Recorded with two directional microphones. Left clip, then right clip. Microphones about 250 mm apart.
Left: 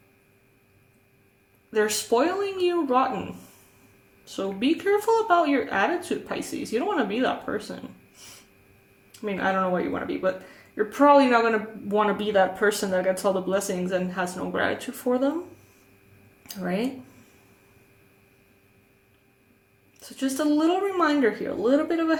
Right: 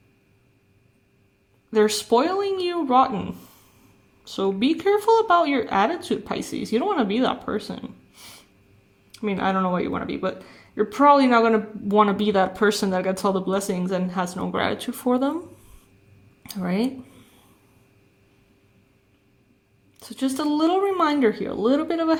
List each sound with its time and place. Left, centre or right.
1.7 s speech: right
16.5 s speech: right
20.0 s speech: right